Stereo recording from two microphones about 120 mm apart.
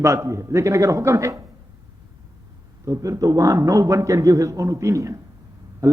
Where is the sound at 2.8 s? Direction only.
30° right (ahead or behind).